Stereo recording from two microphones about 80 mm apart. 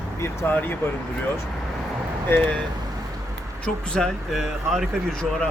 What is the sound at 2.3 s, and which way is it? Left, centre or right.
Speech, centre.